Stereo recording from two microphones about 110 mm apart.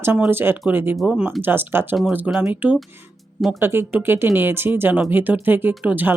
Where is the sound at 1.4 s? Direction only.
20° right (ahead or behind).